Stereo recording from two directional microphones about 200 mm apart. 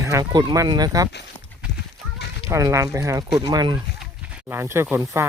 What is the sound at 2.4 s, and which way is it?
Speech, 15° right (ahead or behind).